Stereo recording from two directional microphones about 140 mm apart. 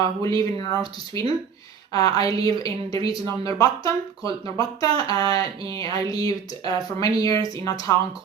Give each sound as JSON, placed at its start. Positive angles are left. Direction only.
{"t": 0.0, "sound": "a woman's voice", "side_deg": 25}